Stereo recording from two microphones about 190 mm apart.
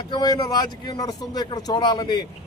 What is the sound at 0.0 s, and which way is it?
Speech, 20° left (ahead or behind).